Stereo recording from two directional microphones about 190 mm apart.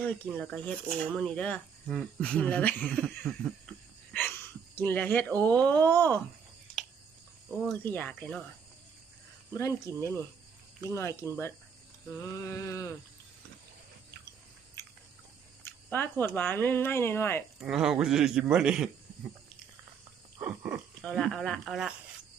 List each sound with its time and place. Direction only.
0.0 s a man's voice: 5° left (ahead or behind)
6.8 s a sound: 5° left (ahead or behind)
7.6 s a man's voice: 5° left (ahead or behind)
9.5 s speech: 15° left (ahead or behind)
15.6 s speech: 10° left (ahead or behind)
17.6 s a man's voice: centre (ahead or behind)
20.4 s a sound: 10° right (ahead or behind)
21.0 s a man's voice: 5° left (ahead or behind)